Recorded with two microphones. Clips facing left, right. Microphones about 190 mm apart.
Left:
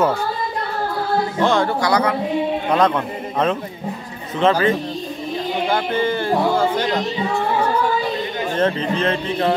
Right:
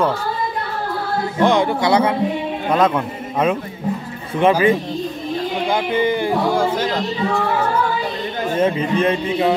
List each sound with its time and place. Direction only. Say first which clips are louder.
1.4 s speech: right 4 dB; 15° right (ahead or behind)
2.7 s speech: right 2 dB; 5° right (ahead or behind)
8.5 s speech: right 2 dB; 10° right (ahead or behind)